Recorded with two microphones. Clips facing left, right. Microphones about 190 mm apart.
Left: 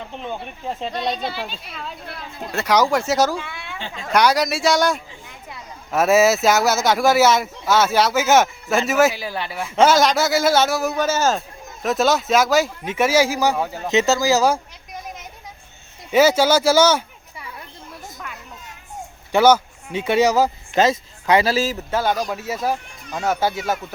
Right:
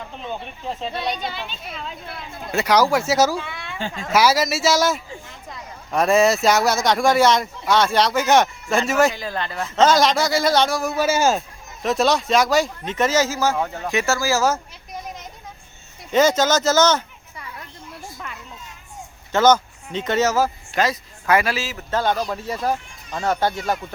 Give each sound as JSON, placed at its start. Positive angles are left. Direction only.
{"t": 0.1, "sound": "speech", "side_deg": 15}
{"t": 1.0, "sound": "speech", "side_deg": 30}
{"t": 1.7, "sound": "speech", "side_deg": 5}
{"t": 11.0, "sound": "speech", "side_deg": -10}
{"t": 11.8, "sound": "speech", "side_deg": 0}
{"t": 16.1, "sound": "speech", "side_deg": 10}
{"t": 19.3, "sound": "speech", "side_deg": 10}
{"t": 21.8, "sound": "speech", "side_deg": 10}